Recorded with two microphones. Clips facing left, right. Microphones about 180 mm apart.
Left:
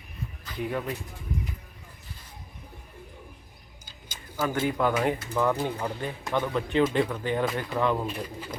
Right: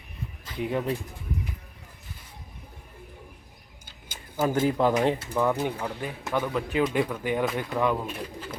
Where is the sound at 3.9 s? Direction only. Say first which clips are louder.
Right 1 dB; 55° right (ahead or behind).